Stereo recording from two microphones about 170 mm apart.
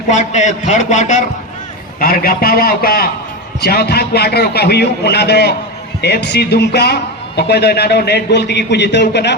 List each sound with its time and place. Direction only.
0.1 s a man's voice: 45° left (ahead or behind)
2.0 s a man's voice: 60° left (ahead or behind); by 9.3 s 85° left